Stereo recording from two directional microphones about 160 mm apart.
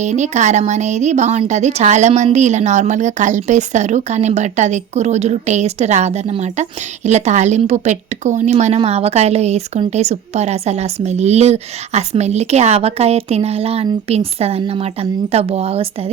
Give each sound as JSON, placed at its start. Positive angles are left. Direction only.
{"t": 0.0, "sound": "a woman's voice", "side_deg": -45}